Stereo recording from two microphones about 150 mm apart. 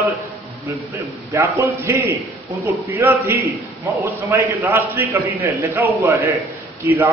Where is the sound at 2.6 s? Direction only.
15° right (ahead or behind).